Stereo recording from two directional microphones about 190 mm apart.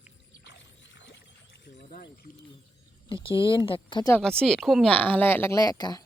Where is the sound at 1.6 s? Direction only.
60° left (ahead or behind).